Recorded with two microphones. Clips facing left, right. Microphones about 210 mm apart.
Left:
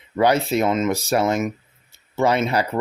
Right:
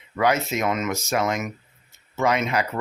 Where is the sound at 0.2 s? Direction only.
35° left (ahead or behind).